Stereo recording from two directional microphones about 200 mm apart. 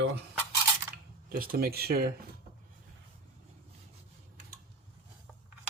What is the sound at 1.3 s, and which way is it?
Speech, 45° right (ahead or behind).